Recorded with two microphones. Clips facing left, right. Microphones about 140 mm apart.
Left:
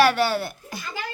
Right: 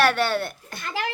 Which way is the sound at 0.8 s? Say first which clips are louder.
Right 5 dB; 70° right (ahead or behind).